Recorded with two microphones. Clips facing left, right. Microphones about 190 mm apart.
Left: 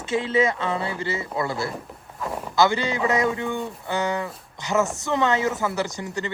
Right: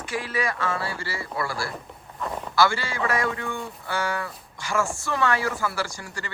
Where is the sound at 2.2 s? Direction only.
Centre (ahead or behind).